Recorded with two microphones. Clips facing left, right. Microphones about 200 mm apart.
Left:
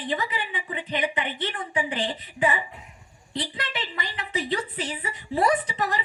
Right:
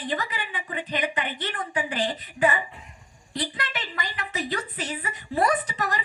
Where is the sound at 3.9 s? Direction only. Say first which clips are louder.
Left 1 dB; 25° left (ahead or behind).